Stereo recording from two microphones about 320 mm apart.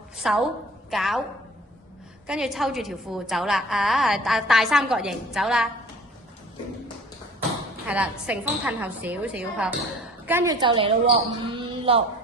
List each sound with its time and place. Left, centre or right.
0.2 s a woman's voice: centre
2.2 s a woman's voice: centre
7.9 s a woman's voice: centre
11.5 s a sound: centre